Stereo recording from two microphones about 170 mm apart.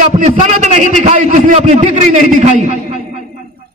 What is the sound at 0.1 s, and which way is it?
A man's voice, 40° right (ahead or behind).